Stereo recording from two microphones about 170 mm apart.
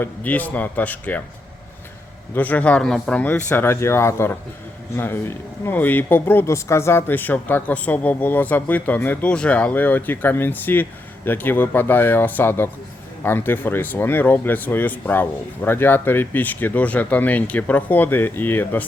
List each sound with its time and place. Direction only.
0.0 s speech: 10° left (ahead or behind)
2.3 s speech: 10° left (ahead or behind)